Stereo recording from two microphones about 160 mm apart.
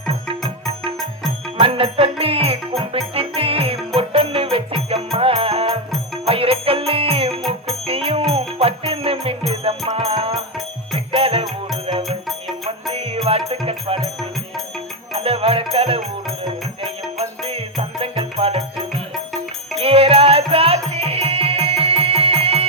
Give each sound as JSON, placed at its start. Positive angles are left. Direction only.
{"t": 1.5, "sound": "music", "side_deg": -35}
{"t": 12.9, "sound": "music", "side_deg": -40}
{"t": 15.1, "sound": "music", "side_deg": -35}